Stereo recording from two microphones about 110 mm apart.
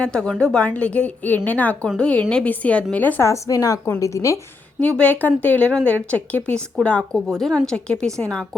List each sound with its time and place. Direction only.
0.0 s speech: 10° left (ahead or behind)
3.2 s speech: 25° left (ahead or behind)
4.8 s a woman's voice: 10° left (ahead or behind)